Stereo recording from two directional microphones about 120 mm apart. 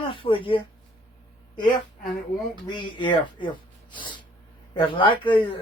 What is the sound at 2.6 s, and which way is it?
Speech, 40° left (ahead or behind).